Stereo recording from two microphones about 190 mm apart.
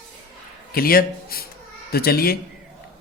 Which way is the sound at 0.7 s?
50° left (ahead or behind).